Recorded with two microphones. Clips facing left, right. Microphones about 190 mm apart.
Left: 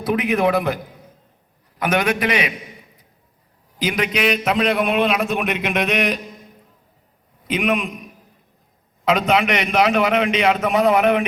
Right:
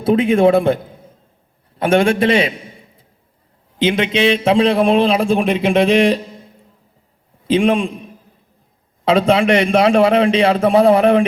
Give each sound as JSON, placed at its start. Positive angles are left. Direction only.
{"t": 0.0, "sound": "a man's voice", "side_deg": -25}